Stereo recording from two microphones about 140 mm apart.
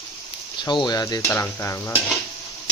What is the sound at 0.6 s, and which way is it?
Speech, 30° left (ahead or behind).